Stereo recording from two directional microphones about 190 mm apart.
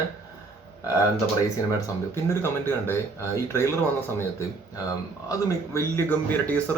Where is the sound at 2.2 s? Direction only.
10° left (ahead or behind).